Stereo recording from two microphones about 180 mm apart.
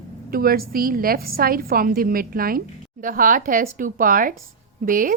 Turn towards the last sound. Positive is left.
turn(degrees=-50)  # may be behind; listen again after turning